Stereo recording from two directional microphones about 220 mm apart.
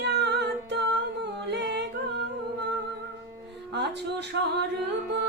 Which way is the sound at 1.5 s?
50° right (ahead or behind).